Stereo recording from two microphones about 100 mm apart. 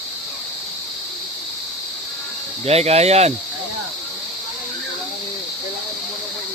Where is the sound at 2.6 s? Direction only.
90° right.